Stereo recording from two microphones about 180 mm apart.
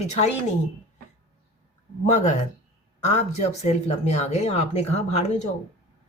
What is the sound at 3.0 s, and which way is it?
A woman's voice, 40° left (ahead or behind).